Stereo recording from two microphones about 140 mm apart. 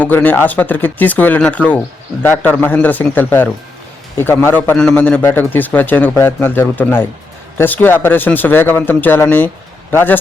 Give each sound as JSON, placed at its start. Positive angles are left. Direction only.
{"t": 0.0, "sound": "a man's voice", "side_deg": 10}